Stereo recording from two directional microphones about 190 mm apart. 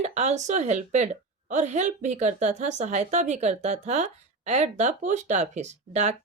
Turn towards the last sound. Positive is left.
turn(degrees=-40)  # may be behind; listen again after turning